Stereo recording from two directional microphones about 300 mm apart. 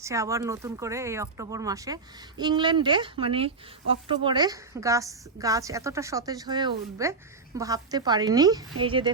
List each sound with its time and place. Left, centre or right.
0.0 s speech: centre